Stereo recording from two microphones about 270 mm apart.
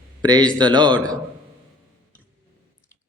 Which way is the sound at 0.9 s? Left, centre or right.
Centre.